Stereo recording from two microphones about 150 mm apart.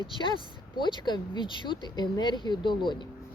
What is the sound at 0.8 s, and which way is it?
Speech, 30° left (ahead or behind).